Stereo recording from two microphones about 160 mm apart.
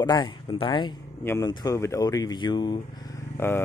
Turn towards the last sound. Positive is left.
turn(degrees=15)  # may be behind; listen again after turning